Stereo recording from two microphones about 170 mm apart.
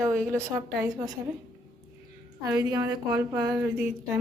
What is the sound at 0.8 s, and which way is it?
Speech, 20° right (ahead or behind).